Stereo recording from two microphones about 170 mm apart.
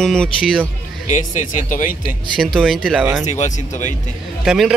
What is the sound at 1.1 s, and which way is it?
Speech, 45° left (ahead or behind).